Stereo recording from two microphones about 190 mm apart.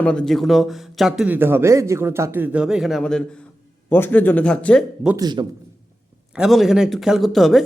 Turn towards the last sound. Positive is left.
turn(degrees=0)  # may be behind; listen again after turning